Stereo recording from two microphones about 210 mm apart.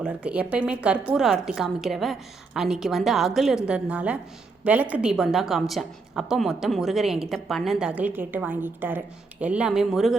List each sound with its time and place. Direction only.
0.0 s a woman's voice: 5° right (ahead or behind)